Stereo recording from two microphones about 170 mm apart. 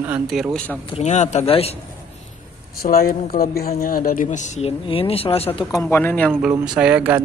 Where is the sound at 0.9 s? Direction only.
45° left (ahead or behind).